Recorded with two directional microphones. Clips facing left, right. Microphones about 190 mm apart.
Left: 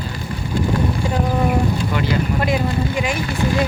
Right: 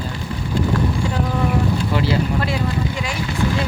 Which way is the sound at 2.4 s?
15° left (ahead or behind).